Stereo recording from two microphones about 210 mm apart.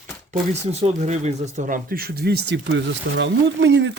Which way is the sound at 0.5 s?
30° right (ahead or behind).